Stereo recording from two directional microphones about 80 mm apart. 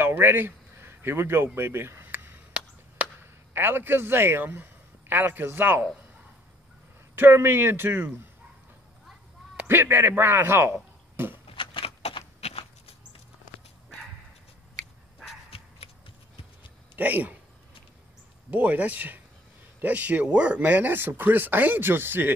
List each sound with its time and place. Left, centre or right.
0.0 s a sound: right
3.2 s speech: right
7.2 s speech: right
9.7 s speech: right
11.5 s a sound: left
16.9 s speech: right
18.5 s speech: right